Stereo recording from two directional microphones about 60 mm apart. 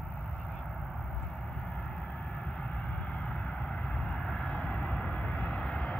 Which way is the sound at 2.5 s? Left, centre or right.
Centre.